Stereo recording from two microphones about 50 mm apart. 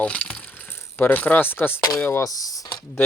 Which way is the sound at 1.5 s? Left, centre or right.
Left.